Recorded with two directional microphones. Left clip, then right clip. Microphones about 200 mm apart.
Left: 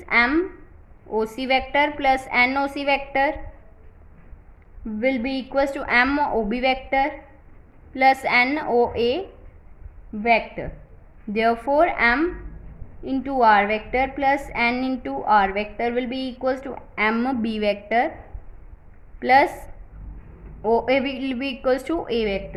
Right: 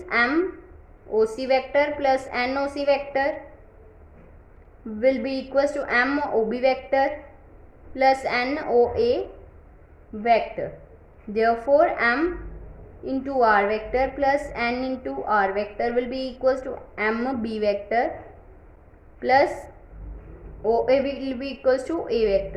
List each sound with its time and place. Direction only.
0.0 s a sound: 35° left (ahead or behind)
1.2 s a woman's voice: 30° left (ahead or behind)
4.9 s a woman's voice: 25° left (ahead or behind)
10.2 s a woman's voice: 25° left (ahead or behind)
13.4 s a woman's voice: 30° left (ahead or behind)
19.2 s a woman's voice: 35° left (ahead or behind)
20.6 s a woman's voice: 35° left (ahead or behind)